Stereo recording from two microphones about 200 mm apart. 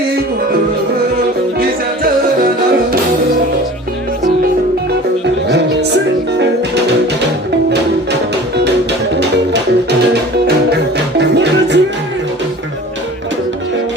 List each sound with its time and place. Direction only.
11.2 s music: 60° right (ahead or behind)